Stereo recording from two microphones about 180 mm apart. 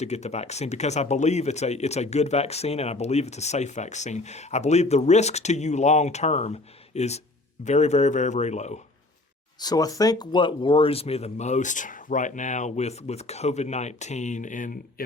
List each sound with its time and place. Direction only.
0.0 s speech: 40° left (ahead or behind)
9.6 s speech: 20° left (ahead or behind); by 15.0 s 50° left (ahead or behind)